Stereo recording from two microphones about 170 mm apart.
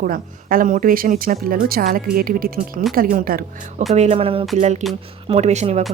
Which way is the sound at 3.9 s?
40° right (ahead or behind).